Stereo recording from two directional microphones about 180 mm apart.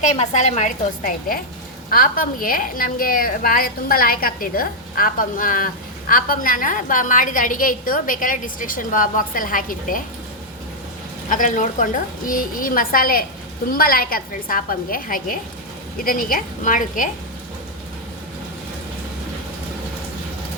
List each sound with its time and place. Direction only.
0.0 s a woman's voice: 40° left (ahead or behind)
11.3 s a woman's voice: 45° left (ahead or behind)